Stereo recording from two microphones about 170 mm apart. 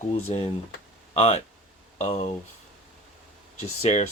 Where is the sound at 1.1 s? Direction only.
40° left (ahead or behind).